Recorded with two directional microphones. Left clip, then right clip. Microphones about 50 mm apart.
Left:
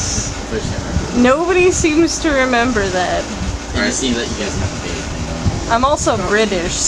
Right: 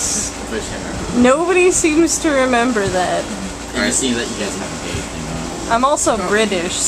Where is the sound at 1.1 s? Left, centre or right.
Centre.